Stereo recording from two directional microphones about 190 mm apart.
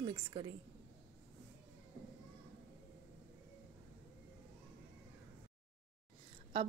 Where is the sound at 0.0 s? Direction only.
30° right (ahead or behind).